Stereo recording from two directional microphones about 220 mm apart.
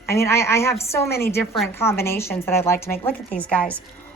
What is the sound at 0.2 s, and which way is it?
A woman's voice, 10° left (ahead or behind).